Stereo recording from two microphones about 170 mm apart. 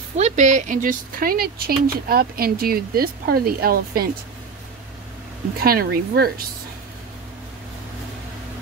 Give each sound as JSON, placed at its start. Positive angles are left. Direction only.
{"t": 0.2, "sound": "speech", "side_deg": -45}
{"t": 5.6, "sound": "speech", "side_deg": -60}